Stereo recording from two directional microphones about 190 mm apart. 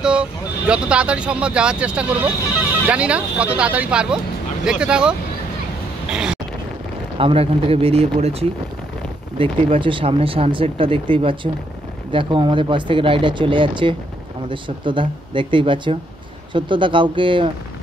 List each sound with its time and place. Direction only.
0.0 s speech: 5° right (ahead or behind)
6.1 s wind noise: 5° right (ahead or behind)
7.2 s speech: 30° right (ahead or behind)